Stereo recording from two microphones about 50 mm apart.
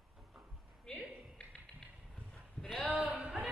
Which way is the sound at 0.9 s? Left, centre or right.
Centre.